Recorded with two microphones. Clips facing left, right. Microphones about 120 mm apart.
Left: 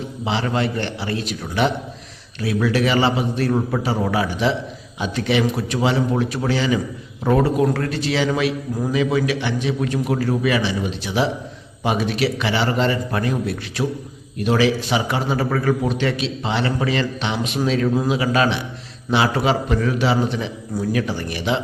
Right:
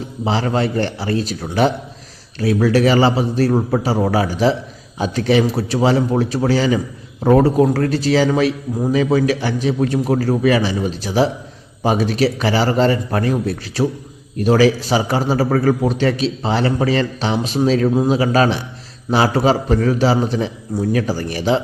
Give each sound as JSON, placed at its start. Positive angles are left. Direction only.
{"t": 0.3, "sound": "a man's voice", "side_deg": -35}